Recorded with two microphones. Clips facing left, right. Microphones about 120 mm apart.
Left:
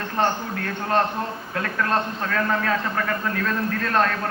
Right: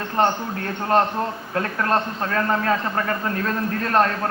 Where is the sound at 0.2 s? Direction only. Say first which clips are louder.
Right 3 dB; 35° right (ahead or behind).